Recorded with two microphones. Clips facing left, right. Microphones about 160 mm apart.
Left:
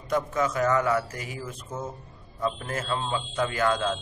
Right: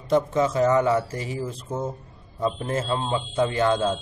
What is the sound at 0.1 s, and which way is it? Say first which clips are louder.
A man's voice: right 5 dB; 25° right (ahead or behind).